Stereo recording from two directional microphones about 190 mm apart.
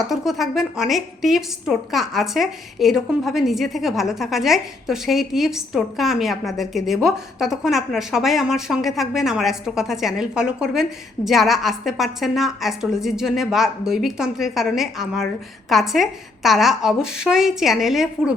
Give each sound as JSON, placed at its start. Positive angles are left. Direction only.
{"t": 0.0, "sound": "a woman's voice", "side_deg": 0}